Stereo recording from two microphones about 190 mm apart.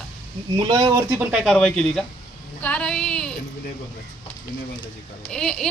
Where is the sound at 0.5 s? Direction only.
20° right (ahead or behind).